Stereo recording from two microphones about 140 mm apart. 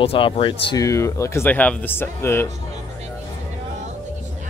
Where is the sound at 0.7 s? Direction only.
20° left (ahead or behind).